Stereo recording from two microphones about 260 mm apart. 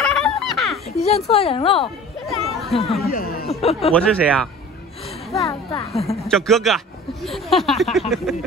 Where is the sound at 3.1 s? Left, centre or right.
Left.